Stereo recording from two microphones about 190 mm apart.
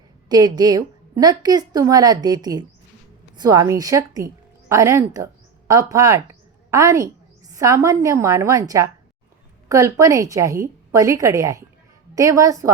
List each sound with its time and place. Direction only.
0.3 s a woman's voice: 20° right (ahead or behind)